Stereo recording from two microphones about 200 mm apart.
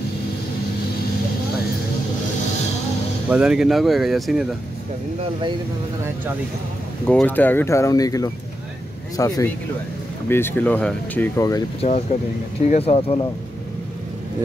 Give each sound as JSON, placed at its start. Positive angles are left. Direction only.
{"t": 3.3, "sound": "speech", "side_deg": -5}
{"t": 7.1, "sound": "speech", "side_deg": 5}
{"t": 12.6, "sound": "speech", "side_deg": 30}